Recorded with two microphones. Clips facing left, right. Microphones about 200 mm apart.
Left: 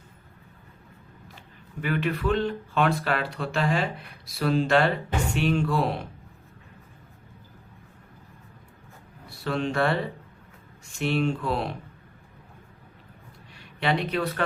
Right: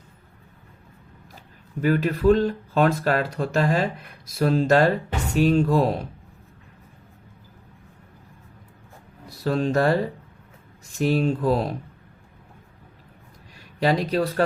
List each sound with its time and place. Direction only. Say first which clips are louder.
1.8 s speech: right 7 dB; 40° right (ahead or behind)
9.3 s speech: right 5 dB; 40° right (ahead or behind)
13.6 s speech: right 4 dB; 40° right (ahead or behind)